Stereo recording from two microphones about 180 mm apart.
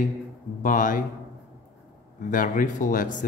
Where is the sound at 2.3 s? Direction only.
50° left (ahead or behind).